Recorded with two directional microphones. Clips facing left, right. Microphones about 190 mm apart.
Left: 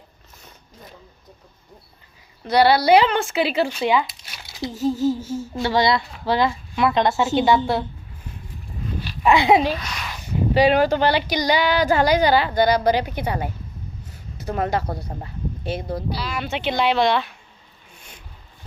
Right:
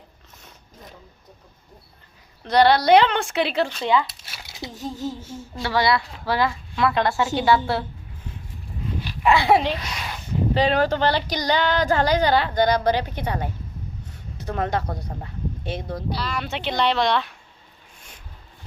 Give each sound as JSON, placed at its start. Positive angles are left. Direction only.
{"t": 2.4, "sound": "speech", "side_deg": 5}
{"t": 4.6, "sound": "a sound", "side_deg": 5}
{"t": 5.6, "sound": "speech", "side_deg": 20}
{"t": 9.2, "sound": "speech", "side_deg": 20}